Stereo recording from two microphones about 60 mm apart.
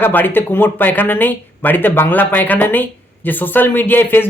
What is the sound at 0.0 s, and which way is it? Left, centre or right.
Speech, left.